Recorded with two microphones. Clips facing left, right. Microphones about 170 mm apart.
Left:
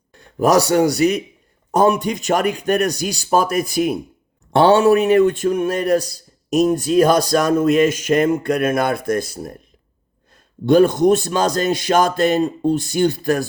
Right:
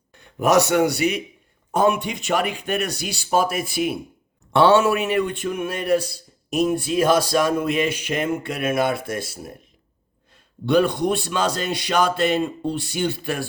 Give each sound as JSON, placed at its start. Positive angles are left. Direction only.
{"t": 0.1, "sound": "a man's voice", "side_deg": 35}
{"t": 10.7, "sound": "speech", "side_deg": 45}